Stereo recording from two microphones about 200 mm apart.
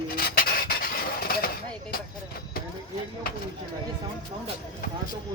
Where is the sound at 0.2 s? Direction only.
50° left (ahead or behind).